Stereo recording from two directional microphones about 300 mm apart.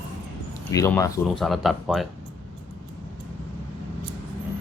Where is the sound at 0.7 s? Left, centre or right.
Centre.